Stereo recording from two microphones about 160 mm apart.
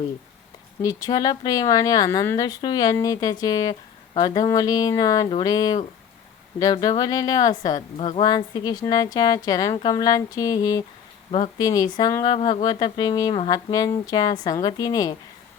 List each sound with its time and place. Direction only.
0.8 s speech: 20° left (ahead or behind)
7.8 s speech: 40° left (ahead or behind); by 10.8 s 25° left (ahead or behind)
11.3 s speech: 45° left (ahead or behind)
11.5 s speech: 25° left (ahead or behind)
12.4 s speech: 40° left (ahead or behind)
12.6 s speech: 25° left (ahead or behind)